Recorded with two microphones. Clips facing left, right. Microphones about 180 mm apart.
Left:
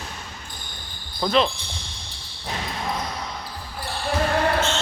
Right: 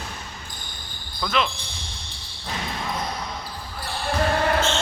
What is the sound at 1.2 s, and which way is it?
Speech, 35° left (ahead or behind).